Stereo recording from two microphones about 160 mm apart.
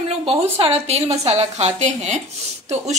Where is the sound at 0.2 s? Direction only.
35° right (ahead or behind).